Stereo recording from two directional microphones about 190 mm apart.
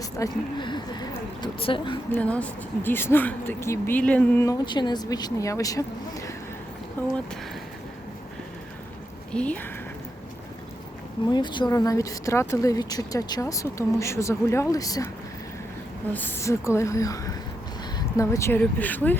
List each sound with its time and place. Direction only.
0.0 s speech: 20° left (ahead or behind)
2.1 s speech: 5° left (ahead or behind)
9.3 s speech: 5° left (ahead or behind)
11.3 s speech: 25° left (ahead or behind)
16.1 s speech: 15° left (ahead or behind)